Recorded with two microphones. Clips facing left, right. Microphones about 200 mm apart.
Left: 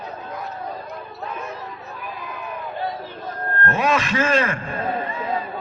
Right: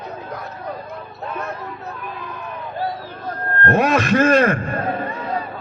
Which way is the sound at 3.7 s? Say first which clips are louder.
Right 5 dB; 60° right (ahead or behind).